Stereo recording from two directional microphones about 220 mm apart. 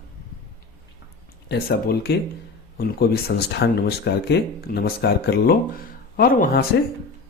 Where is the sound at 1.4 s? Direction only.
45° left (ahead or behind).